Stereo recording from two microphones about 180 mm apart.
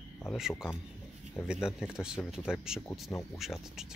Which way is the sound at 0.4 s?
5° right (ahead or behind).